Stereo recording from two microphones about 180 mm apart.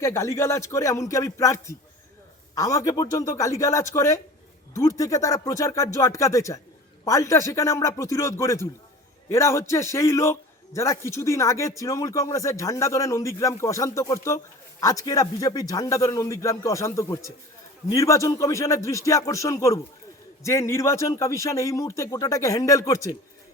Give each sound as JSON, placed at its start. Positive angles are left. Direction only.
{"t": 0.0, "sound": "a man's voice", "side_deg": 15}